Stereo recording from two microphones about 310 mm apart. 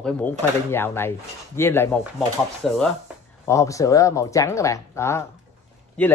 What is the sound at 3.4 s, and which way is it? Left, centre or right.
Speech, centre.